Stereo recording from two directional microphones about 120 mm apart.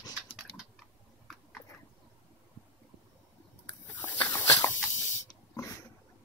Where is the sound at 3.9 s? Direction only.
15° left (ahead or behind).